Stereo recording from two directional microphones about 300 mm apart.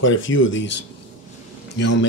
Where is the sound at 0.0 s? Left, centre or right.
Left.